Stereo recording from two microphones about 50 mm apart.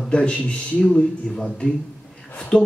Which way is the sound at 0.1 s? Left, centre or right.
Centre.